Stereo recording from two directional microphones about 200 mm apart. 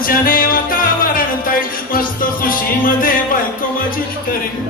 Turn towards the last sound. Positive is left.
turn(degrees=45)  # may be behind; listen again after turning